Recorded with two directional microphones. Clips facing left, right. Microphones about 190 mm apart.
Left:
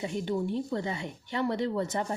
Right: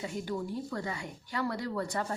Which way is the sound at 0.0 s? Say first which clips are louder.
Left 5 dB; 25° left (ahead or behind).